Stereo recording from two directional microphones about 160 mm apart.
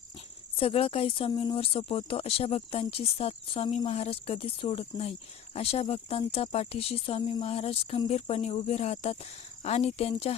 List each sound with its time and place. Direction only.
0.6 s speech: 35° left (ahead or behind)